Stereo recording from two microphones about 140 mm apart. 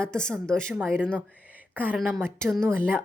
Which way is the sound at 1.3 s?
10° right (ahead or behind).